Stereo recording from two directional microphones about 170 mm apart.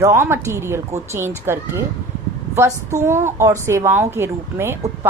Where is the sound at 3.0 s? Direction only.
15° right (ahead or behind).